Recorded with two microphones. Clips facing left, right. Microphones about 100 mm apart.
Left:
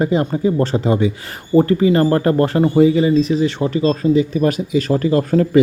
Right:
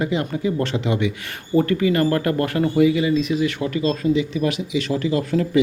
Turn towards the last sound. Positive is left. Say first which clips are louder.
# left 6 dB
turn(degrees=40)  # may be behind; listen again after turning